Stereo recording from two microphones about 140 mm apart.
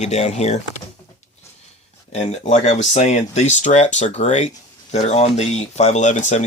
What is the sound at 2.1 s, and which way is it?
Speech, 55° left (ahead or behind).